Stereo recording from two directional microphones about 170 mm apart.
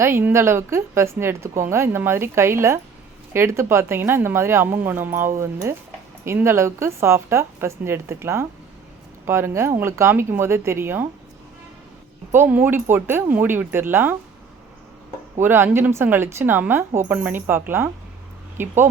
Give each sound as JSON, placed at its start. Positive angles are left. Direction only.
{"t": 0.0, "sound": "a woman's voice", "side_deg": -15}
{"t": 12.3, "sound": "a woman's voice", "side_deg": -10}
{"t": 15.4, "sound": "a woman's voice", "side_deg": -15}